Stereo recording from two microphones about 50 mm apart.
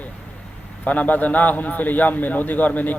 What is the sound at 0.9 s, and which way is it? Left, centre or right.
A man's voice, left.